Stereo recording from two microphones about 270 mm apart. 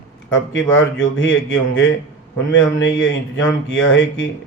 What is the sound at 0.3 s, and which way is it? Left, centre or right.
Speech, left.